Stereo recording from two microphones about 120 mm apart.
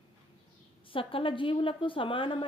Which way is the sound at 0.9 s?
45° left (ahead or behind).